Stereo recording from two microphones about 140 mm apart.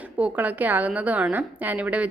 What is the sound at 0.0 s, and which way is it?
A woman's voice, 10° right (ahead or behind).